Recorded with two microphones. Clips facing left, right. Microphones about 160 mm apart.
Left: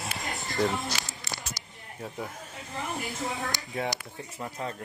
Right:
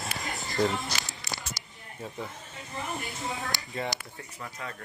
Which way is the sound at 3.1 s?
Centre (ahead or behind).